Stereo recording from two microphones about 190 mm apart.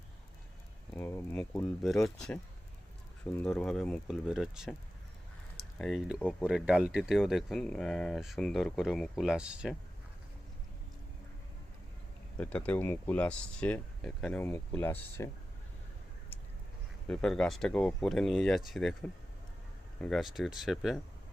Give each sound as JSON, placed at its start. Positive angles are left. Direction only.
{"t": 0.9, "sound": "speech", "side_deg": 10}
{"t": 12.4, "sound": "speech", "side_deg": 5}
{"t": 17.1, "sound": "speech", "side_deg": 5}
{"t": 20.0, "sound": "speech", "side_deg": 0}